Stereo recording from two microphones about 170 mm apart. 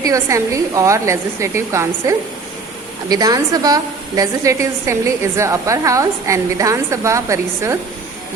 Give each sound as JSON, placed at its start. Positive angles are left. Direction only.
{"t": 0.0, "sound": "a woman's voice", "side_deg": -20}